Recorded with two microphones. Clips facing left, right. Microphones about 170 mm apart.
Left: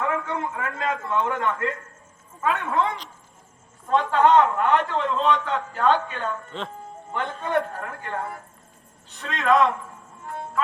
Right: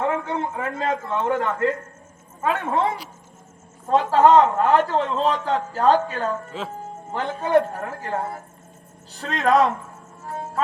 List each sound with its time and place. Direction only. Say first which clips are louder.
0.0 s a man's voice: right 3 dB; 30° right (ahead or behind)
4.1 s a man's voice: right 3 dB; 35° right (ahead or behind)
6.5 s speech: right 2 dB; 5° right (ahead or behind)
7.4 s a man's voice: right 7 dB; 35° right (ahead or behind)
10.2 s music: right 2 dB; 40° right (ahead or behind)